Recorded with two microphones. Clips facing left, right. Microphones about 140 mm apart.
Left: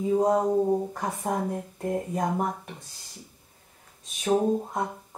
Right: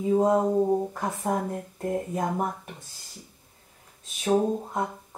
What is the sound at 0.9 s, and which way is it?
Speech, centre (ahead or behind).